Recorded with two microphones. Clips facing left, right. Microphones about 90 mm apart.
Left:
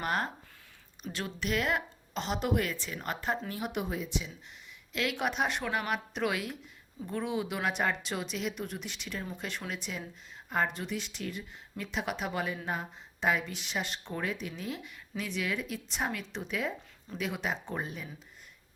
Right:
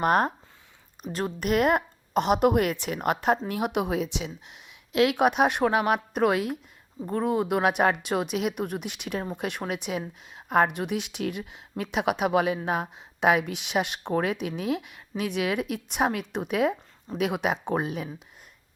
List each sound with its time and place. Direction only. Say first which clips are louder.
0.0 s a woman's voice: right 10 dB; 50° right (ahead or behind)